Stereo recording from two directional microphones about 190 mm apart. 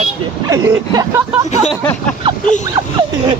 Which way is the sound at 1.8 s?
10° left (ahead or behind).